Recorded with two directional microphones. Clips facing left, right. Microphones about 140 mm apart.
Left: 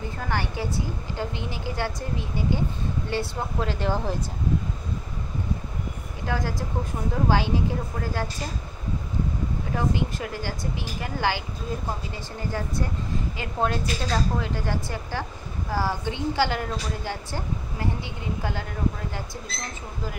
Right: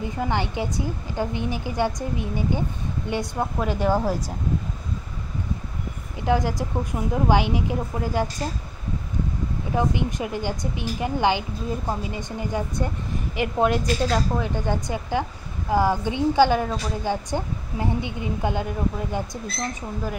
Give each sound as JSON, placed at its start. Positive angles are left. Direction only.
{"t": 0.0, "sound": "a woman's voice", "side_deg": -20}
{"t": 6.2, "sound": "a woman's voice", "side_deg": -15}
{"t": 9.8, "sound": "a woman's voice", "side_deg": -20}